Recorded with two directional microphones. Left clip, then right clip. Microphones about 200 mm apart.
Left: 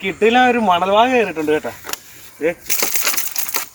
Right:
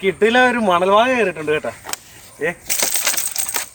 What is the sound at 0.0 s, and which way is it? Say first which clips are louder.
Speech: even; 15° right (ahead or behind).